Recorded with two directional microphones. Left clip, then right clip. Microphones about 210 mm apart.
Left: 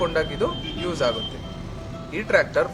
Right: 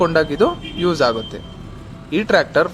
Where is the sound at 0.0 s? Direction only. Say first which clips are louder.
Right 8 dB; 35° right (ahead or behind).